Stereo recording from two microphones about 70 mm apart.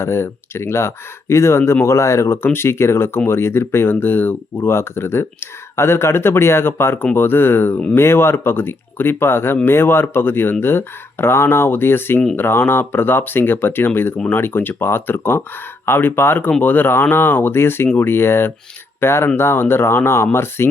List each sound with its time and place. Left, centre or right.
0.0 s speech: left